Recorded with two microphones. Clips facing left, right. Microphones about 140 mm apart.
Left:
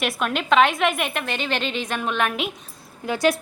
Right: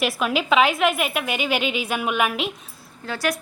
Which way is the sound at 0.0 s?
Centre (ahead or behind).